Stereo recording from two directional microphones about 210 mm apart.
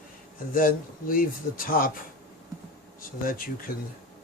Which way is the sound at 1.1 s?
40° left (ahead or behind).